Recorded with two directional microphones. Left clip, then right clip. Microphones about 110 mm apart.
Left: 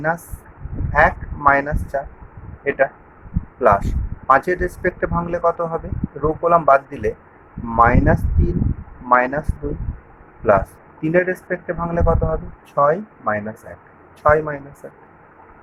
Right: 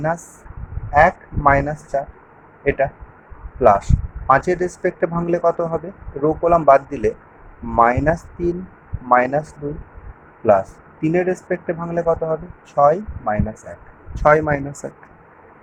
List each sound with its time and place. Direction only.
0.9 s speech: 15° right (ahead or behind)
14.2 s speech: 35° right (ahead or behind)
14.8 s speech: 65° right (ahead or behind)